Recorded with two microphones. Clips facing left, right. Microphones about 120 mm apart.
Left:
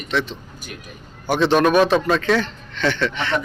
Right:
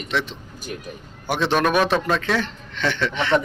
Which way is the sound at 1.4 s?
Centre (ahead or behind).